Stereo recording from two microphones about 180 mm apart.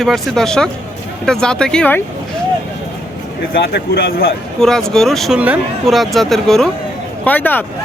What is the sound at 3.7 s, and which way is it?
Speech, 60° left (ahead or behind).